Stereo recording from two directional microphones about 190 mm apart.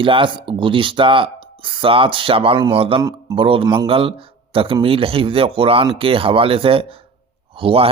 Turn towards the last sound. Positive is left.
turn(degrees=-30)  # may be behind; listen again after turning